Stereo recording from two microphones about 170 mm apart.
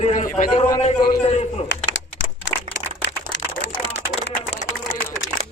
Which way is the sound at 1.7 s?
90° left.